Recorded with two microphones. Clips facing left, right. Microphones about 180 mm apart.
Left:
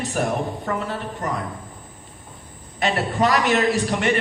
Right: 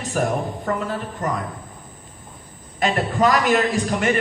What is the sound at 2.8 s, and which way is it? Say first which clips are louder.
A woman's voice: right 2 dB; 45° right (ahead or behind).